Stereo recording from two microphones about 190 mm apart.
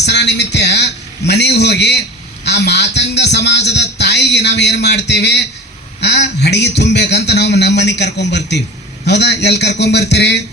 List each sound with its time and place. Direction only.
0.0 s a man's voice: 65° left (ahead or behind)